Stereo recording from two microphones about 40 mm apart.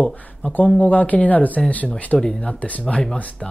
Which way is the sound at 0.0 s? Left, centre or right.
Left.